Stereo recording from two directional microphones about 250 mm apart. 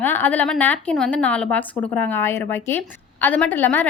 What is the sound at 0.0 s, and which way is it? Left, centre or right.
A woman's voice, centre.